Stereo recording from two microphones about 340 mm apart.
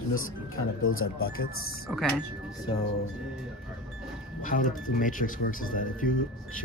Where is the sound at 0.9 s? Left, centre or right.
Left.